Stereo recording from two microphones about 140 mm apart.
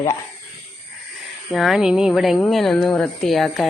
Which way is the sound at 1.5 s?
Centre (ahead or behind).